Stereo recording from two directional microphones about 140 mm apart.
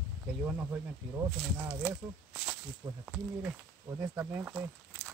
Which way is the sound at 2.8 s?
25° right (ahead or behind).